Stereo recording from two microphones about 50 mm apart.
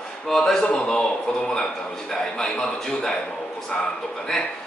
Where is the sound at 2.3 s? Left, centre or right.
Centre.